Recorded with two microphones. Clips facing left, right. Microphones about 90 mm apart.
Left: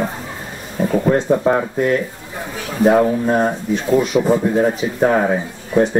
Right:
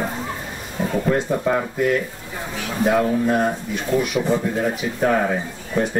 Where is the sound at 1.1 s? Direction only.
30° left (ahead or behind).